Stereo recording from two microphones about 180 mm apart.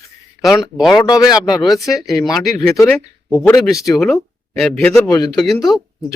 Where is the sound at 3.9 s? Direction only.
Centre (ahead or behind).